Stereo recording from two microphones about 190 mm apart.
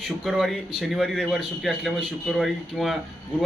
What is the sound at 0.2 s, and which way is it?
A man's voice, centre (ahead or behind).